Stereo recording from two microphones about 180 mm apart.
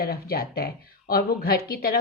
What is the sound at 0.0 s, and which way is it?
Speech, 60° left (ahead or behind).